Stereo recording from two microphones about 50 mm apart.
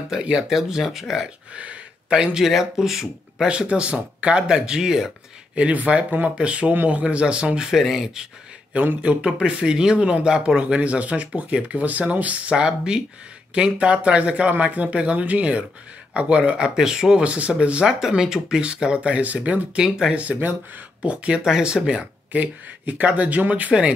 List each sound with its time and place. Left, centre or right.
0.1 s speech: centre
1.5 s speech: right
2.4 s speech: centre
3.4 s speech: right
7.8 s speech: centre
9.0 s speech: right
12.5 s speech: centre
17.8 s speech: centre; by 19.8 s right
19.8 s speech: centre
20.2 s speech: right
21.5 s speech: centre
22.3 s speech: right